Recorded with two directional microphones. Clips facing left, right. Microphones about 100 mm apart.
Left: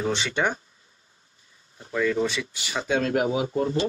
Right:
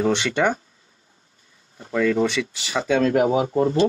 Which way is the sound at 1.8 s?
60° right (ahead or behind).